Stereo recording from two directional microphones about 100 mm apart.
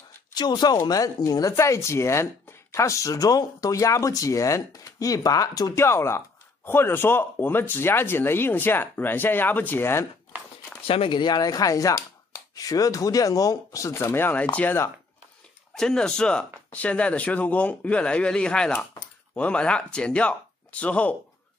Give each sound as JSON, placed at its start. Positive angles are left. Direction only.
{"t": 0.3, "sound": "speech", "side_deg": 45}
{"t": 5.8, "sound": "speech", "side_deg": 25}
{"t": 10.9, "sound": "speech", "side_deg": 60}
{"t": 15.7, "sound": "speech", "side_deg": 5}